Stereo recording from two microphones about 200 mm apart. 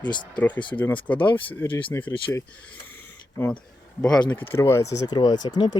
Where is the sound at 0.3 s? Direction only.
10° left (ahead or behind).